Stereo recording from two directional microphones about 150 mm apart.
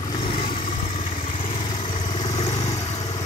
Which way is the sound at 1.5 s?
55° left (ahead or behind).